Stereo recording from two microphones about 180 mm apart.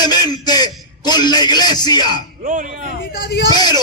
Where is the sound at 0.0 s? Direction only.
20° left (ahead or behind).